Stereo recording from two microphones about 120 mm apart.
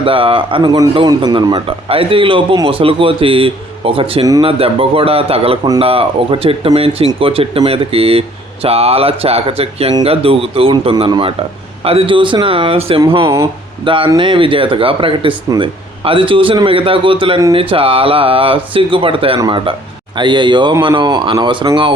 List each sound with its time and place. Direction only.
0.0 s speech: 50° right (ahead or behind)
1.0 s speech: 35° right (ahead or behind)
1.9 s speech: 50° right (ahead or behind)
13.2 s speech: 25° right (ahead or behind)
13.8 s speech: 45° right (ahead or behind)